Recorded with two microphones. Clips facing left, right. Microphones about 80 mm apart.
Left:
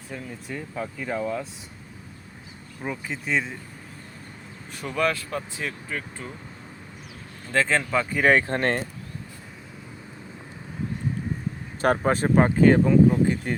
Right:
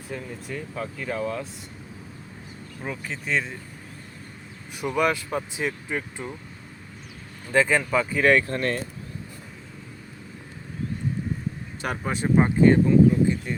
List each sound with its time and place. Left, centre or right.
0.1 s speech: centre
2.8 s speech: centre
4.7 s speech: centre
7.5 s speech: centre
7.8 s speech: centre
8.3 s speech: left
8.5 s speech: left
11.8 s speech: left
12.7 s speech: left